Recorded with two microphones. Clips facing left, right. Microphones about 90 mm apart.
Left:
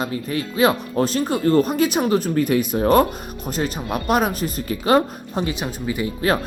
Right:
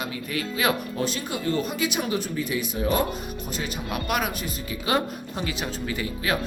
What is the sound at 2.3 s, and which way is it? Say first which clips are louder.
Speech: left 9 dB; 55° left (ahead or behind).